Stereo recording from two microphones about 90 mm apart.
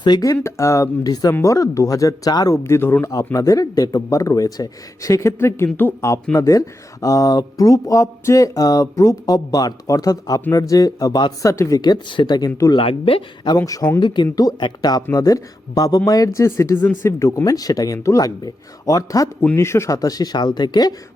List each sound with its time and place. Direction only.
0.1 s speech: 50° left (ahead or behind)
0.4 s speech: 35° left (ahead or behind)
2.6 s speech: 25° left (ahead or behind)
3.3 s speech: 40° left (ahead or behind)
6.3 s speech: 40° left (ahead or behind)
11.5 s speech: 30° left (ahead or behind)
11.8 s speech: 55° left (ahead or behind)
12.5 s speech: 35° left (ahead or behind)
12.7 s speech: 90° left
13.7 s speech: 40° left (ahead or behind)
14.0 s speech: 55° left (ahead or behind)
15.1 s speech: 40° left (ahead or behind)